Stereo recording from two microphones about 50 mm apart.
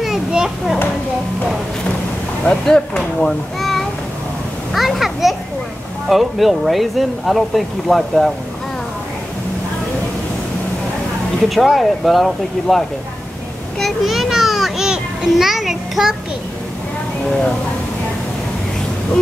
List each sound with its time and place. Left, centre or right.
0.3 s a child's voice: centre
2.4 s speech: centre
3.3 s a sound: centre
4.7 s a child's voice: centre
11.4 s speech: centre
13.7 s children playing: centre